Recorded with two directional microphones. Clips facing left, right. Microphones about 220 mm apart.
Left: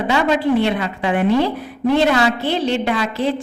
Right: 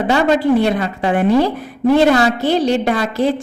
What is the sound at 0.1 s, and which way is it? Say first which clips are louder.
A woman's voice: right 3 dB; 40° right (ahead or behind).